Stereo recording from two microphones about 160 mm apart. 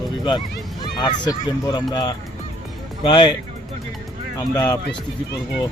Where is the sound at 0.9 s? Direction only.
25° left (ahead or behind).